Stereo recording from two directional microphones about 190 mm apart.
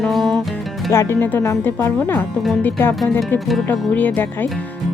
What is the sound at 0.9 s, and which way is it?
Speech, 15° left (ahead or behind).